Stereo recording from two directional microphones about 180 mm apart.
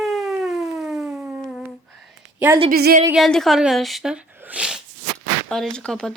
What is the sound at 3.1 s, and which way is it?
Speech, centre (ahead or behind).